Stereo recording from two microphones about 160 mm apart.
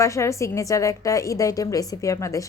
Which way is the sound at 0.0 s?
20° left (ahead or behind).